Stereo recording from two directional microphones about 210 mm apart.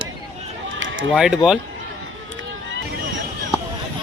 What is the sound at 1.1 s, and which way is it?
Speech, centre (ahead or behind).